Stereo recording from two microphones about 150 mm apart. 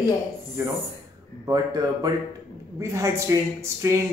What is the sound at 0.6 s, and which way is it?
A man's voice, 15° right (ahead or behind).